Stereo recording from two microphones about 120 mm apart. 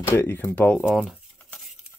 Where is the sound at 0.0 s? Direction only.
20° left (ahead or behind).